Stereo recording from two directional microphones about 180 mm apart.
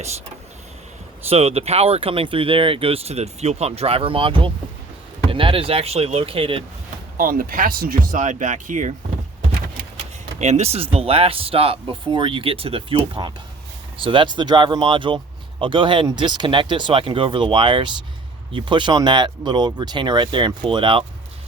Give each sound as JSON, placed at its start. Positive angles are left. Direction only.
{"t": 1.3, "sound": "speech", "side_deg": -35}
{"t": 7.2, "sound": "speech", "side_deg": -50}
{"t": 10.3, "sound": "speech", "side_deg": -40}